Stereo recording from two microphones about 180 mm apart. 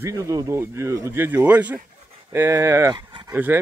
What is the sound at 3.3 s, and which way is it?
Speech, 10° right (ahead or behind).